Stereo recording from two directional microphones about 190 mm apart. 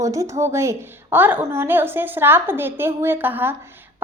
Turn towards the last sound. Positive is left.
turn(degrees=-10)  # may be behind; listen again after turning